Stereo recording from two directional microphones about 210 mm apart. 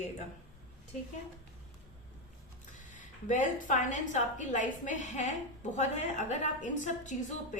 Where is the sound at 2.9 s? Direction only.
35° left (ahead or behind).